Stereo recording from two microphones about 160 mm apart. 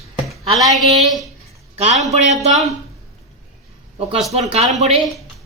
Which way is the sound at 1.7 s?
45° right (ahead or behind).